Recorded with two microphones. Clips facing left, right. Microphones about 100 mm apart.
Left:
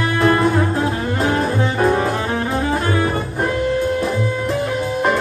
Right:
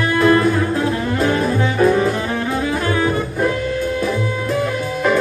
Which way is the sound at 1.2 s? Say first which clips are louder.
Even; 35° left (ahead or behind).